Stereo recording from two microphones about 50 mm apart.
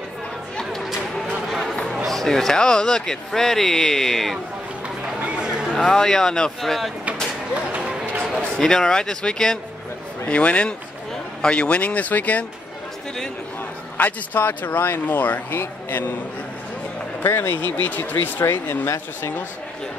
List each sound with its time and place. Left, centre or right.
2.0 s speech: centre
5.2 s a sound: centre
5.8 s speech: centre
8.5 s speech: centre
10.2 s speech: left
13.9 s speech: left
15.6 s a man's voice: left
17.2 s speech: left
17.6 s speech: left
18.4 s a man's voice: left